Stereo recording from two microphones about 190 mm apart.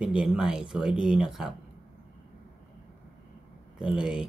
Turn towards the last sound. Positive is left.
turn(degrees=-5)  # may be behind; listen again after turning